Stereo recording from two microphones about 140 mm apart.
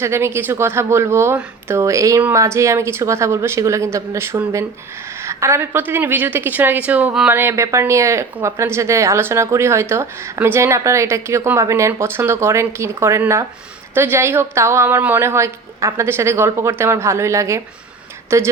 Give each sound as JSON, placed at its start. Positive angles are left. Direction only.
{"t": 0.0, "sound": "speech", "side_deg": -20}
{"t": 7.3, "sound": "speech", "side_deg": -20}